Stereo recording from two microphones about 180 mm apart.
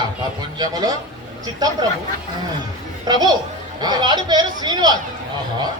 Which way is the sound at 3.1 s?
25° right (ahead or behind).